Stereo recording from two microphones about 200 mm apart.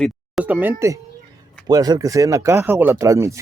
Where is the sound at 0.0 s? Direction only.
5° right (ahead or behind).